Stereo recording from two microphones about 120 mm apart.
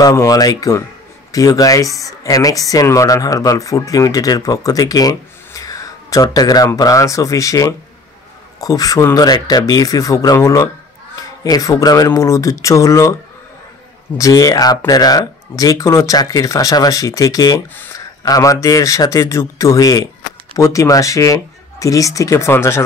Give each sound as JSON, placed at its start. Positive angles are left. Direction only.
{"t": 0.0, "sound": "speech", "side_deg": 25}
{"t": 14.1, "sound": "speech", "side_deg": 30}